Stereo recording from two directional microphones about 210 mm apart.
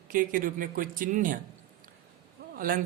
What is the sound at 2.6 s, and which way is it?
Speech, 40° right (ahead or behind).